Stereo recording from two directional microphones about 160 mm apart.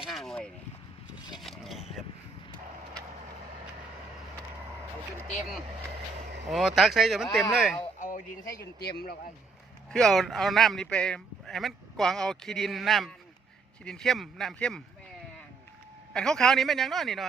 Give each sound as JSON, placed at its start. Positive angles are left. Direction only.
{"t": 0.0, "sound": "a sound", "side_deg": 0}
{"t": 6.5, "sound": "a man's voice", "side_deg": 0}
{"t": 7.9, "sound": "a sound", "side_deg": 55}
{"t": 8.8, "sound": "speech", "side_deg": 75}
{"t": 9.9, "sound": "a man's voice", "side_deg": 0}
{"t": 16.1, "sound": "a man's voice", "side_deg": 5}